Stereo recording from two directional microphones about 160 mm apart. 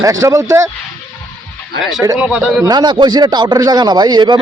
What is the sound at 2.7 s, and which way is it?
Speech, 25° right (ahead or behind).